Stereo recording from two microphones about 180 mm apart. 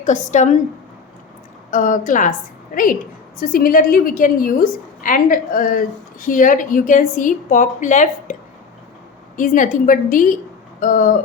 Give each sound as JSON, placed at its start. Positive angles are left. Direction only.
{"t": 0.0, "sound": "a woman's voice", "side_deg": 40}
{"t": 1.7, "sound": "a woman's voice", "side_deg": 45}
{"t": 3.4, "sound": "a woman's voice", "side_deg": 50}